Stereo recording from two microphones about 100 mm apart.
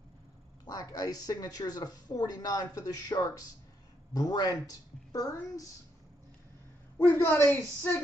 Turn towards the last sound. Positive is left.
turn(degrees=20)  # may be behind; listen again after turning